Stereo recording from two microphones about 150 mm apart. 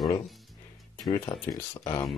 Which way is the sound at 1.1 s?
25° left (ahead or behind).